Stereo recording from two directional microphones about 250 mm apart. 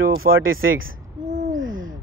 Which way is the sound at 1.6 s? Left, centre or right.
Right.